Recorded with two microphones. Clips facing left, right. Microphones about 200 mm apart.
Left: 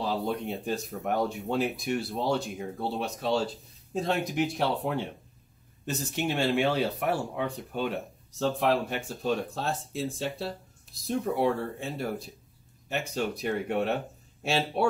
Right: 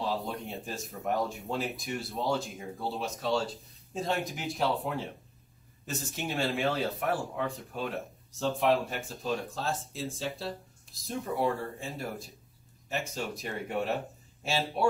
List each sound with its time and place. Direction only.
0.0 s speech: centre (ahead or behind)